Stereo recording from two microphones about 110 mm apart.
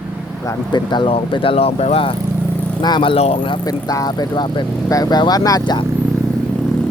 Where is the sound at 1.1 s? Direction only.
65° left (ahead or behind).